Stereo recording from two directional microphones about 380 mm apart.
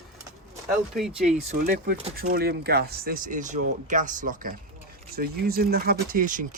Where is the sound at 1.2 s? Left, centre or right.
Centre.